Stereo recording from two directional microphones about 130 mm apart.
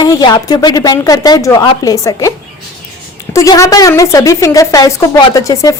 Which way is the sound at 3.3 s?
25° left (ahead or behind).